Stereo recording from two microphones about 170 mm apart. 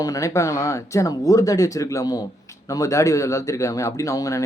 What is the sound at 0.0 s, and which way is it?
Speech, 20° left (ahead or behind).